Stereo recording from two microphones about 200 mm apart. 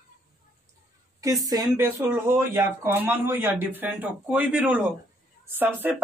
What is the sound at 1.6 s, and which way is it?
Speech, 5° right (ahead or behind).